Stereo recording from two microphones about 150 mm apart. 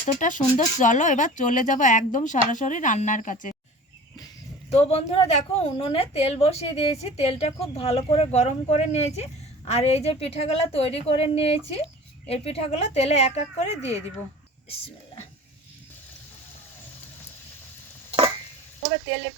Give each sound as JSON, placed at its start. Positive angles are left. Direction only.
{"t": 0.0, "sound": "speech", "side_deg": 60}
{"t": 4.7, "sound": "a woman's voice", "side_deg": 45}